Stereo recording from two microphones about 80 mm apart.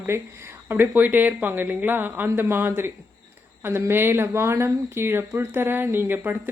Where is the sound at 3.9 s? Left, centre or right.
Right.